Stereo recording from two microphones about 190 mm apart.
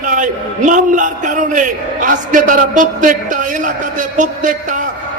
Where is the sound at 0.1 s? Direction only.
45° right (ahead or behind).